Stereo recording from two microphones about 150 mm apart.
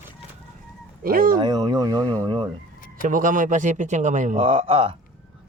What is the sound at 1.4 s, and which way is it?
Speech, 30° right (ahead or behind).